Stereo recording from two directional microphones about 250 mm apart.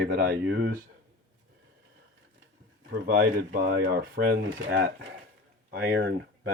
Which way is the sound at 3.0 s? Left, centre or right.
Right.